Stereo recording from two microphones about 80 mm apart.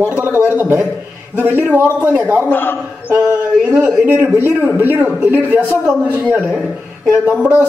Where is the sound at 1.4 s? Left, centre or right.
Right.